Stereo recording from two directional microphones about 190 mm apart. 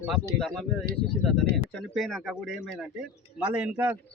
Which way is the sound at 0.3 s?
5° left (ahead or behind).